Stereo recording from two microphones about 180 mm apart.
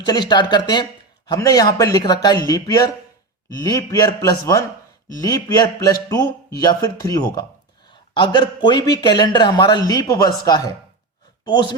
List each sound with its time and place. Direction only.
0.0 s a man's voice: 25° left (ahead or behind)